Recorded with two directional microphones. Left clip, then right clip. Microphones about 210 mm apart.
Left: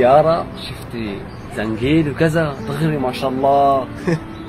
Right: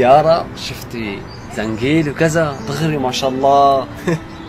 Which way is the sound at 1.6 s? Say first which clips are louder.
Right 1 dB; 15° right (ahead or behind).